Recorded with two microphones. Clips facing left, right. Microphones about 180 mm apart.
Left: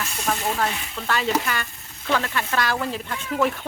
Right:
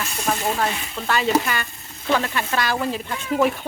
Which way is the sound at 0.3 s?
15° right (ahead or behind).